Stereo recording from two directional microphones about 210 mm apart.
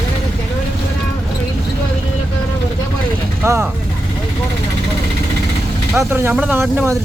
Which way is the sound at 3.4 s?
10° right (ahead or behind).